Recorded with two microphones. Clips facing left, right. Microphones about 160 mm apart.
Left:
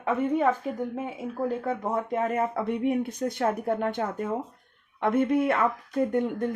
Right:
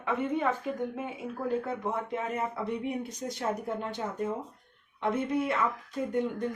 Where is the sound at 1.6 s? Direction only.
50° left (ahead or behind).